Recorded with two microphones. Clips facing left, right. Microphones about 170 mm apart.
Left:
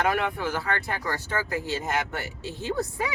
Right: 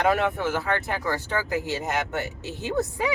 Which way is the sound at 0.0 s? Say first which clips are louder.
Right 3 dB; 20° right (ahead or behind).